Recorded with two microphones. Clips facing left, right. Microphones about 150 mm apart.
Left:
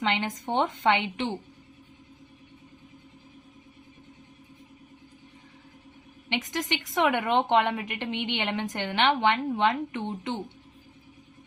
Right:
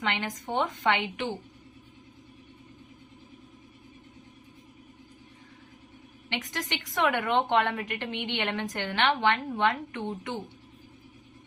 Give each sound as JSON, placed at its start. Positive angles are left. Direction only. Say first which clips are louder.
{"t": 0.0, "sound": "a woman's voice", "louder": "left 3 dB", "side_deg": 20}
{"t": 6.2, "sound": "a woman's voice", "louder": "left 4 dB", "side_deg": 20}